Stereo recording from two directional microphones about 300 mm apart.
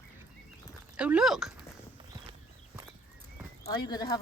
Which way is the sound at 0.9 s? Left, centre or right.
Centre.